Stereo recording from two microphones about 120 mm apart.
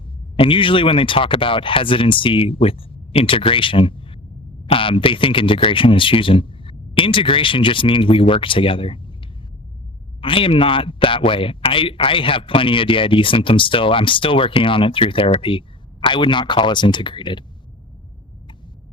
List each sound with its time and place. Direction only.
0.3 s a man's voice: 45° left (ahead or behind)
10.2 s a man's voice: 45° left (ahead or behind)